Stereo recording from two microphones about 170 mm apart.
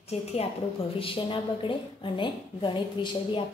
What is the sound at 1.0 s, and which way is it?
A woman's voice, 30° left (ahead or behind).